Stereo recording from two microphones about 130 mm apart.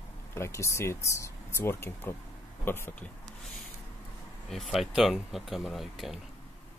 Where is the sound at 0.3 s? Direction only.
20° left (ahead or behind).